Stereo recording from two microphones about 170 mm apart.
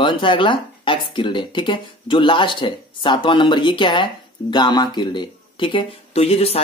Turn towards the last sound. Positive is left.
turn(degrees=35)  # may be behind; listen again after turning